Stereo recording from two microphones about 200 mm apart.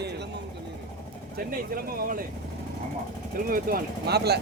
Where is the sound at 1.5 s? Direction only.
45° right (ahead or behind).